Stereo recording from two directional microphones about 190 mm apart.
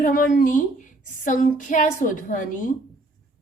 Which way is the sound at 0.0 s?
45° left (ahead or behind).